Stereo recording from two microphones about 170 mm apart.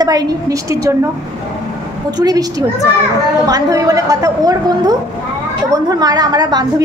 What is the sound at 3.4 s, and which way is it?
A woman's voice, 20° right (ahead or behind).